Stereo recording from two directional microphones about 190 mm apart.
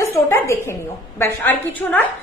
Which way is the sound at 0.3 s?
15° left (ahead or behind).